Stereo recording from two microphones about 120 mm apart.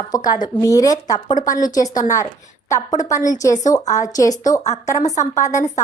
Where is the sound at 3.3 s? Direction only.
30° left (ahead or behind).